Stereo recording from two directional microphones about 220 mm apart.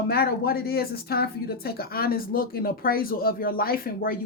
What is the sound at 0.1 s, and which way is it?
A woman's voice, 45° left (ahead or behind).